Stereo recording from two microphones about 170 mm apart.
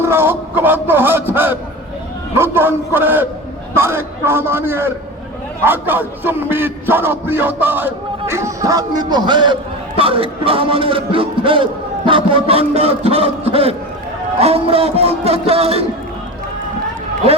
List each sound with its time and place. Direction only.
0.0 s a man's voice: 15° right (ahead or behind); by 15.8 s 35° right (ahead or behind)